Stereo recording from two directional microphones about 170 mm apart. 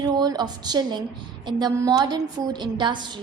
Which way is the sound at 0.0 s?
25° right (ahead or behind).